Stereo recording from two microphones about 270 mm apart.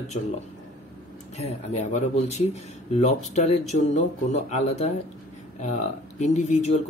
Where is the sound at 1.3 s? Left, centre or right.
Left.